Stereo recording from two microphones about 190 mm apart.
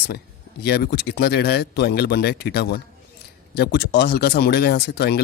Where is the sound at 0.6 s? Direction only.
55° left (ahead or behind).